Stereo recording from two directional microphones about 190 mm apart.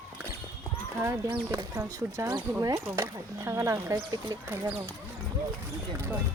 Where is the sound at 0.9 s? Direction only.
15° right (ahead or behind).